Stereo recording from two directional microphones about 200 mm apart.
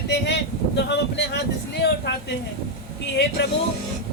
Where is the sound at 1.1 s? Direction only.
60° left (ahead or behind).